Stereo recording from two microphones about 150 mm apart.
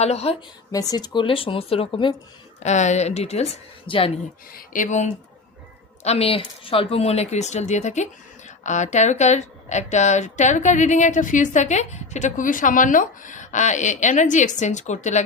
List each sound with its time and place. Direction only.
0.0 s speech: 45° left (ahead or behind)
0.7 s speech: 25° left (ahead or behind)
2.6 s speech: 50° left (ahead or behind)
4.5 s speech: 60° left (ahead or behind)
6.0 s a woman's voice: 45° left (ahead or behind)